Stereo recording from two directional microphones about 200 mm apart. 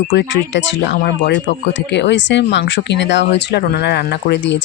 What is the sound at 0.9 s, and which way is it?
Speech, 50° left (ahead or behind).